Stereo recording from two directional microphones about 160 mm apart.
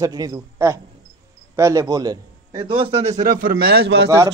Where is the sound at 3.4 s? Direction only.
70° right (ahead or behind); by 4.0 s 90° right.